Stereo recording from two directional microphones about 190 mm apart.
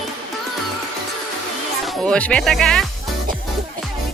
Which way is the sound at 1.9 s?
5° left (ahead or behind).